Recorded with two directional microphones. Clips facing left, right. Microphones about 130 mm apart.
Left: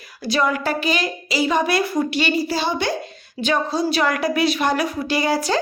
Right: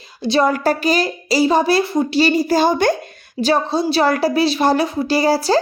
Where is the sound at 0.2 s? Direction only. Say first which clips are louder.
Right 5 dB; 30° right (ahead or behind); by 2.9 s 45° right (ahead or behind).